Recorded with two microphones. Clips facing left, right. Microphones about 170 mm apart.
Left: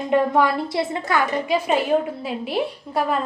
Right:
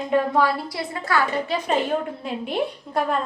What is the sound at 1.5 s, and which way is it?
A woman's voice, 5° left (ahead or behind).